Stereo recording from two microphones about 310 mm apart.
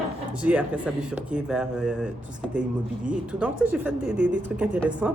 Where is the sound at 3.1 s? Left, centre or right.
Centre.